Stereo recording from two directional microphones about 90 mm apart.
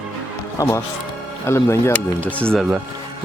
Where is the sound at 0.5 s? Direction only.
40° left (ahead or behind).